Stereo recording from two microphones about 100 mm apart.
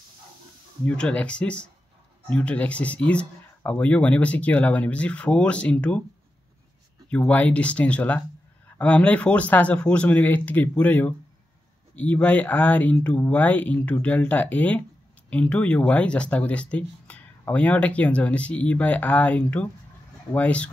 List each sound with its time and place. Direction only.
0.8 s speech: 10° left (ahead or behind)
7.1 s speech: 15° left (ahead or behind)